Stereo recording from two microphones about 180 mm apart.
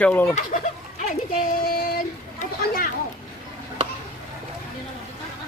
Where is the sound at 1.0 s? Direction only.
50° left (ahead or behind).